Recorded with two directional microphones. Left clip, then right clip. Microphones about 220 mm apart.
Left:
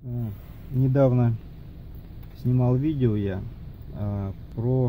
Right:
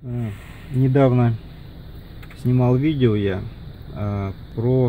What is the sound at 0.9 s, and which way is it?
Speech, 5° right (ahead or behind).